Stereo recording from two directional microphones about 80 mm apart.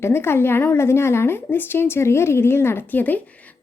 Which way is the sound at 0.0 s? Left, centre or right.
Left.